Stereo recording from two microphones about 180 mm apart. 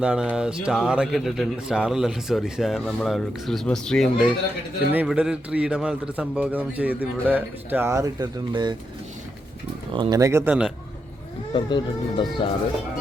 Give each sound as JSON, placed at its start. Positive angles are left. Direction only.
{"t": 0.0, "sound": "speech", "side_deg": -5}
{"t": 4.9, "sound": "a man's voice", "side_deg": -10}
{"t": 9.9, "sound": "a man's voice", "side_deg": -25}
{"t": 11.5, "sound": "speech", "side_deg": 25}